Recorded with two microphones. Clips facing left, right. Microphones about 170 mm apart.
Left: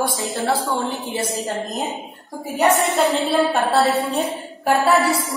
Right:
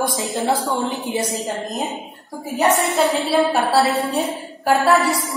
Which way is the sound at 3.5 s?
Centre (ahead or behind).